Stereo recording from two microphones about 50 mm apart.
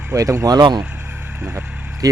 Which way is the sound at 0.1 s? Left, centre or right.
Right.